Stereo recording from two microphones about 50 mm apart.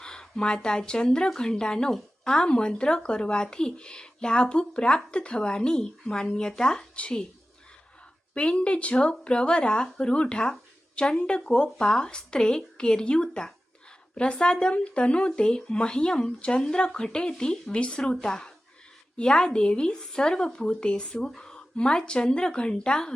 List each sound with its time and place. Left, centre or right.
0.0 s speech: centre
8.4 s speech: left